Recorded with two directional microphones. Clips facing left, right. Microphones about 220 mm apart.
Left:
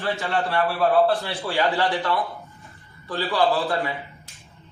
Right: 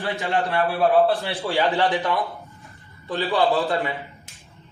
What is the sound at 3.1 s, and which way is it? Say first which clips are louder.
Speech: right 1 dB; 15° right (ahead or behind).